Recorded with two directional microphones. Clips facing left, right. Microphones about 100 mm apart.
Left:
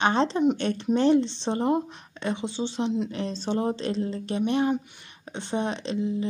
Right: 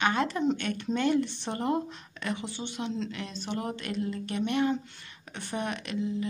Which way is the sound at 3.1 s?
30° left (ahead or behind).